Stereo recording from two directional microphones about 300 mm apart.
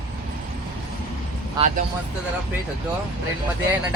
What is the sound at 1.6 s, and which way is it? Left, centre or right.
Speech, centre.